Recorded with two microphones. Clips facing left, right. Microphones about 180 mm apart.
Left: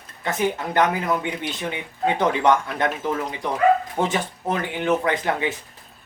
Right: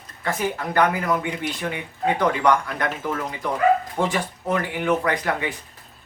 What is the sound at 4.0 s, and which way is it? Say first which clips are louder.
Speech: even; 20° left (ahead or behind).